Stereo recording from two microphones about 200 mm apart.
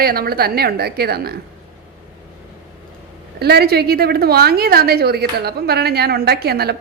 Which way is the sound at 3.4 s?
50° right (ahead or behind).